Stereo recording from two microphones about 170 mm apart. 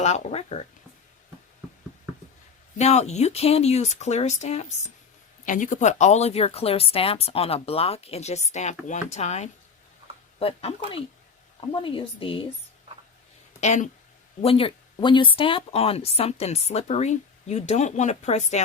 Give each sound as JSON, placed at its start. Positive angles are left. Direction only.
{"t": 0.0, "sound": "speech", "side_deg": 40}
{"t": 2.7, "sound": "speech", "side_deg": 40}
{"t": 13.6, "sound": "speech", "side_deg": 45}
{"t": 14.4, "sound": "speech", "side_deg": 30}